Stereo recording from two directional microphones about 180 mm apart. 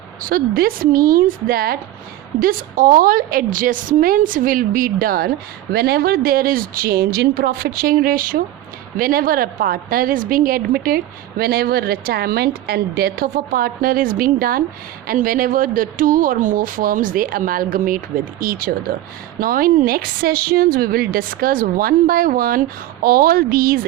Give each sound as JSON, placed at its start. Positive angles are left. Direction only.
{"t": 0.2, "sound": "a woman's voice", "side_deg": -50}